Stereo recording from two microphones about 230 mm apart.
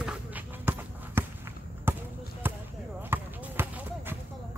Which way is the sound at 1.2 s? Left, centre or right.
Centre.